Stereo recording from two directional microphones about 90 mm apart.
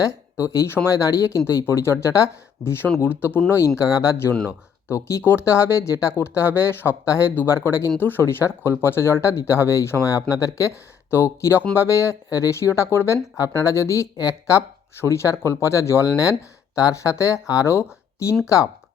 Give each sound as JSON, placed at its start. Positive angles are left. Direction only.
{"t": 0.0, "sound": "speech", "side_deg": 30}
{"t": 3.9, "sound": "speech", "side_deg": 35}